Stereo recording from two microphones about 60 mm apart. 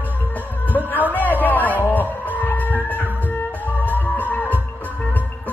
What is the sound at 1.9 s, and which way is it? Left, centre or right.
Music, left.